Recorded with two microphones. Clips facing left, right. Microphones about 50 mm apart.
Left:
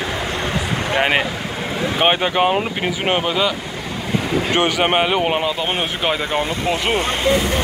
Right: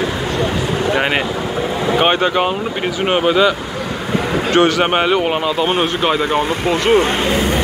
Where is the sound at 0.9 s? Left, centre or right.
Centre.